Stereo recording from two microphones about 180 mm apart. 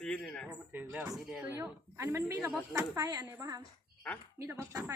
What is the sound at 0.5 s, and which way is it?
Speech, 10° right (ahead or behind).